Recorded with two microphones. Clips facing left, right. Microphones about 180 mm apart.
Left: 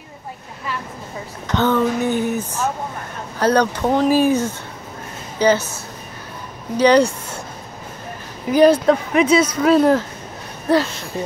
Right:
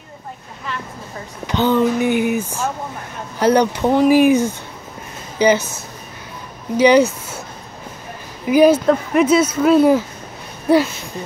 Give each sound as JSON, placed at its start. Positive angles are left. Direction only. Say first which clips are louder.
{"t": 1.5, "sound": "speech", "louder": "right 2 dB", "side_deg": -10}
{"t": 6.8, "sound": "speech", "louder": "right 1 dB", "side_deg": -5}
{"t": 8.5, "sound": "speech", "louder": "right 1 dB", "side_deg": -10}